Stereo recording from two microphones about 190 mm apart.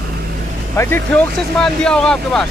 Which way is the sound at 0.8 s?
10° left (ahead or behind).